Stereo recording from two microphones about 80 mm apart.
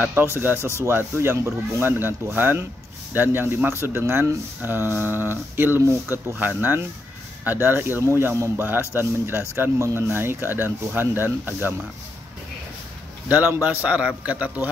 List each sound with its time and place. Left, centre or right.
0.1 s a man's voice: right
13.3 s a man's voice: right